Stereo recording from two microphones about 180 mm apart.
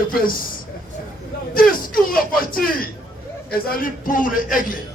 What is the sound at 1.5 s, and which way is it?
A man's voice, 55° left (ahead or behind).